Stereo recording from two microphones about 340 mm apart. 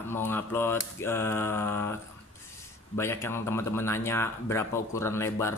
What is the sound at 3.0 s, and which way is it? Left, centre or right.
Speech, centre.